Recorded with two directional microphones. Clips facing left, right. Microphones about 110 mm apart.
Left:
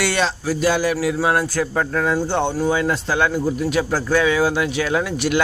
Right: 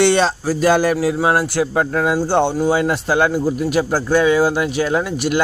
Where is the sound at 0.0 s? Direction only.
30° right (ahead or behind); by 0.9 s 45° right (ahead or behind).